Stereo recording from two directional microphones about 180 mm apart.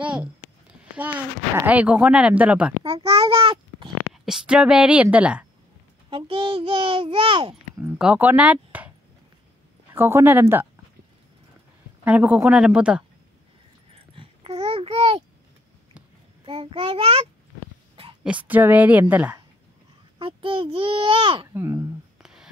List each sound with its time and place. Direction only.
0.0 s a sound: 5° right (ahead or behind)
1.6 s a woman's voice: 10° right (ahead or behind)
2.8 s a child's voice: 30° right (ahead or behind)
4.1 s a woman's voice: 5° right (ahead or behind)
6.0 s a child's voice: 30° right (ahead or behind)
7.8 s speech: 10° right (ahead or behind)
9.9 s a woman's voice: 10° right (ahead or behind)
12.0 s a woman's voice: 10° right (ahead or behind)
13.9 s babbling: 30° right (ahead or behind)
16.4 s a child's voice: 30° right (ahead or behind)
18.2 s a woman's voice: 10° right (ahead or behind)
20.2 s a child's voice: 30° right (ahead or behind)
21.5 s a woman's voice: 15° right (ahead or behind)
22.2 s music: 5° right (ahead or behind)